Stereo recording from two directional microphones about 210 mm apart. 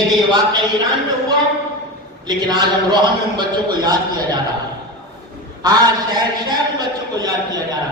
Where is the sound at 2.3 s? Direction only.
20° right (ahead or behind).